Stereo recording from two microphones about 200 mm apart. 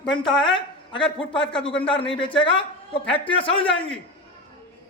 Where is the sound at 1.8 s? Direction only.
25° left (ahead or behind).